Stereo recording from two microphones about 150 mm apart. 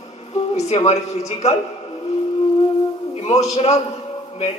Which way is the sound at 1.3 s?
45° left (ahead or behind).